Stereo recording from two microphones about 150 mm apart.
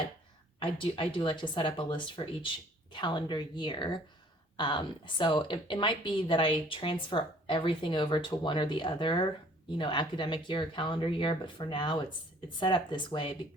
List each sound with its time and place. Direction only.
0.6 s a woman's voice: 35° left (ahead or behind)